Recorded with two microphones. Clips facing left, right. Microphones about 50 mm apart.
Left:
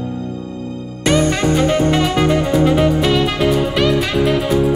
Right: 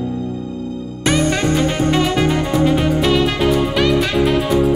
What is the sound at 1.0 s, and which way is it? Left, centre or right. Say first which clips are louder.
Music: left 2 dB; centre.